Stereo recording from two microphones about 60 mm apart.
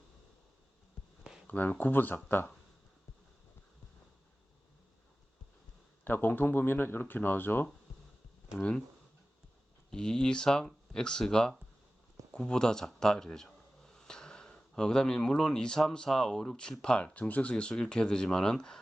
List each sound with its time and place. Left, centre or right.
1.5 s speech: left
6.1 s speech: left
9.9 s speech: centre